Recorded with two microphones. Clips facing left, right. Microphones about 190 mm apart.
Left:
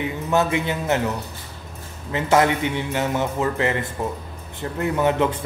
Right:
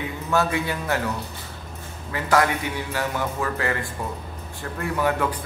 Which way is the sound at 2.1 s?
20° left (ahead or behind).